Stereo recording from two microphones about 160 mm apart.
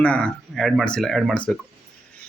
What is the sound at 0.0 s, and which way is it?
Speech, 5° left (ahead or behind).